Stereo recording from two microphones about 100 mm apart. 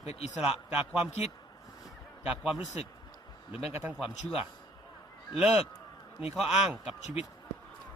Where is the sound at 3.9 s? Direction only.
5° right (ahead or behind).